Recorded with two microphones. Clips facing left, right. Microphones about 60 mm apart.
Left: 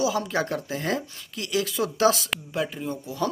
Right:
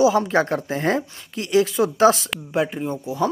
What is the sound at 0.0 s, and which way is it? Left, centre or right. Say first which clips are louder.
Speech: right 8 dB; right.